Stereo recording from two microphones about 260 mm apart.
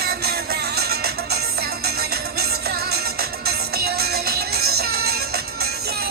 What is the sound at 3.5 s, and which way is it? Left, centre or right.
Music, right.